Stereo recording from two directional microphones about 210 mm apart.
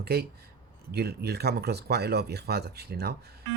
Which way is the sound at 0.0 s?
50° right (ahead or behind).